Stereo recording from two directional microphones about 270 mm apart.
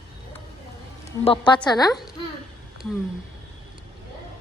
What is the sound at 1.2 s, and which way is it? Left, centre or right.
Speech, centre.